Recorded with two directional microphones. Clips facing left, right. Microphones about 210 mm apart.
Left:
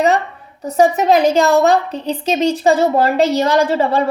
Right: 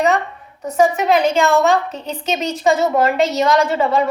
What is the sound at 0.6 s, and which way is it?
A woman's voice, 35° left (ahead or behind).